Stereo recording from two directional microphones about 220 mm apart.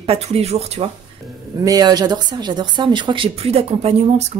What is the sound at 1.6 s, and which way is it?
Speech, 15° right (ahead or behind).